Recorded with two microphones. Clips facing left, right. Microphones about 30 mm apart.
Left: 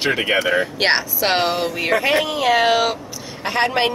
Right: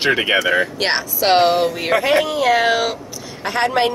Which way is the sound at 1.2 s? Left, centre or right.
Centre.